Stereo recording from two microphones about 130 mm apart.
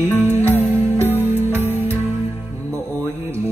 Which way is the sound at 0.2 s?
20° right (ahead or behind).